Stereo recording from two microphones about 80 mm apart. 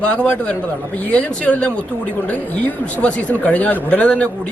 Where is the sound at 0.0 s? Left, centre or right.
Centre.